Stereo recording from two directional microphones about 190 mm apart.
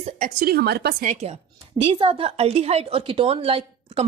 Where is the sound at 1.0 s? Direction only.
35° right (ahead or behind).